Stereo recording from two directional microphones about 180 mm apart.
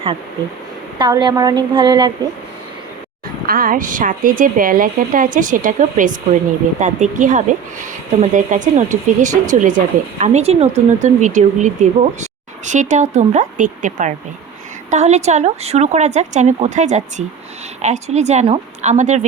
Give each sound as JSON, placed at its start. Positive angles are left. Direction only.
{"t": 0.9, "sound": "a woman's voice", "side_deg": -25}
{"t": 3.4, "sound": "speech", "side_deg": -50}